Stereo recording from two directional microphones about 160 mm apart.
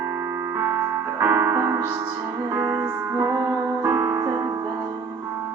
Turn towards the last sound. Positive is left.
turn(degrees=-20)  # may be behind; listen again after turning